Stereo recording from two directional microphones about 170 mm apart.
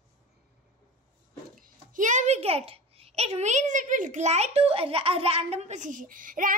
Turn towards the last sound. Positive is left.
turn(degrees=-55)  # may be behind; listen again after turning